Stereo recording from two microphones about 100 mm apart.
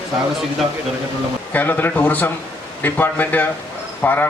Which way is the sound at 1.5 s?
20° left (ahead or behind).